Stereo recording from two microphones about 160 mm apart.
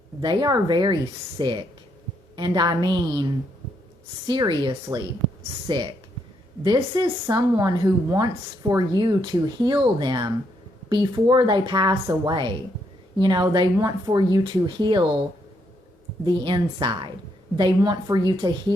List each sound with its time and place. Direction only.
0.2 s a woman's voice: 25° right (ahead or behind)
16.2 s a woman's voice: 30° right (ahead or behind)